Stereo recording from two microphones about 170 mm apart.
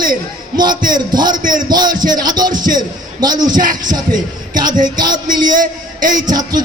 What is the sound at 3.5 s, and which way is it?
Speech, 50° right (ahead or behind).